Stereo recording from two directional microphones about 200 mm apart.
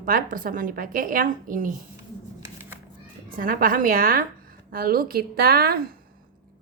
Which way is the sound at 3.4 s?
45° right (ahead or behind).